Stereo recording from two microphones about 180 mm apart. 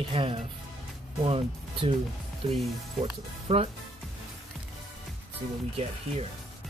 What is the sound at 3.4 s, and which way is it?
Speech, 35° right (ahead or behind).